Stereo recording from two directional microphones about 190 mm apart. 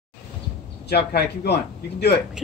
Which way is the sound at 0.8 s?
60° left (ahead or behind).